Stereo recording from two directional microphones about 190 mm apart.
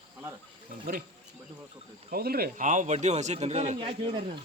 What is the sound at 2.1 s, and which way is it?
A man's voice, 55° right (ahead or behind).